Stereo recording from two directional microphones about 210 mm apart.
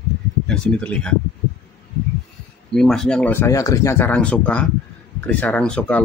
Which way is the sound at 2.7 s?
Centre (ahead or behind).